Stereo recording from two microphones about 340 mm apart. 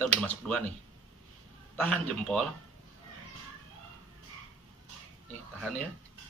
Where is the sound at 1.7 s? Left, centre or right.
Centre.